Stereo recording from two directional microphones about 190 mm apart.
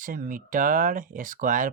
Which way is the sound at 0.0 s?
45° right (ahead or behind).